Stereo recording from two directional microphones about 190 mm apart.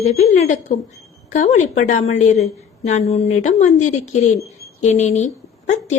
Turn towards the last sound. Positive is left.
turn(degrees=35)  # may be behind; listen again after turning